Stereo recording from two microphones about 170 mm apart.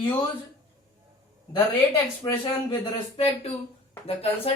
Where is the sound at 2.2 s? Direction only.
25° left (ahead or behind).